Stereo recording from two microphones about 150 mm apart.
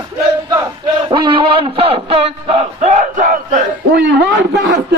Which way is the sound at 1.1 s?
35° right (ahead or behind).